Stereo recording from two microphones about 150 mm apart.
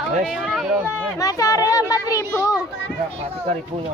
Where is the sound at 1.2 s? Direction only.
25° left (ahead or behind).